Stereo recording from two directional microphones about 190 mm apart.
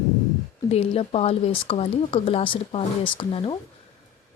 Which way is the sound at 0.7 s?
30° left (ahead or behind).